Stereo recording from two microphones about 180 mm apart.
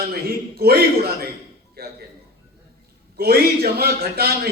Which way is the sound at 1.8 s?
60° right (ahead or behind).